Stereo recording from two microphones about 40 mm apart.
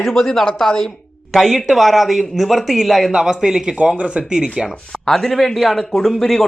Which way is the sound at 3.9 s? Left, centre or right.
Right.